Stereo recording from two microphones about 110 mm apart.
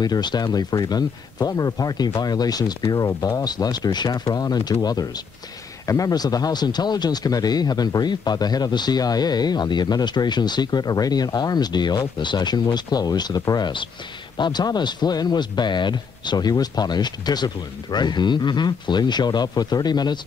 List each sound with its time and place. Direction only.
0.0 s speech: 40° left (ahead or behind)